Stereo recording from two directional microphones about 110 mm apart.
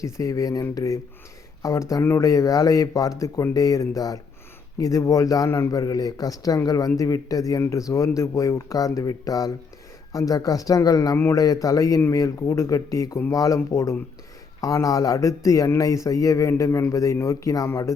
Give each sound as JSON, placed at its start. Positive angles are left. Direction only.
{"t": 0.0, "sound": "a man's voice", "side_deg": 30}